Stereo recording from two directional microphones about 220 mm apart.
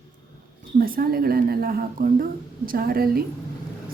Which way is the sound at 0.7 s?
40° right (ahead or behind).